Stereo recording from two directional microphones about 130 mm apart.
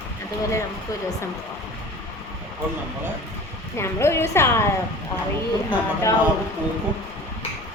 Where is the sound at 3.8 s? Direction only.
20° left (ahead or behind).